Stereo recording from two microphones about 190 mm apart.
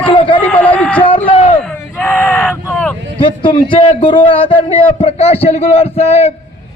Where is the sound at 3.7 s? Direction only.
25° left (ahead or behind).